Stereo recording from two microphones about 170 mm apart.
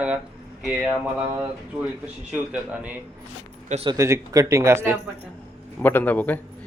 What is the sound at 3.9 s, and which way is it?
A man's voice, 20° right (ahead or behind).